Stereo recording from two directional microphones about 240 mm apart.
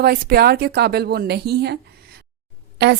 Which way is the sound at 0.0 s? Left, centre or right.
Right.